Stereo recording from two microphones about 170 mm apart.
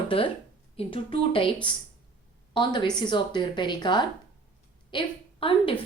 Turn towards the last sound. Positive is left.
turn(degrees=30)  # may be behind; listen again after turning